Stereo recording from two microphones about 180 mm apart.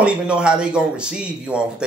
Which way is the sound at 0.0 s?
5° right (ahead or behind).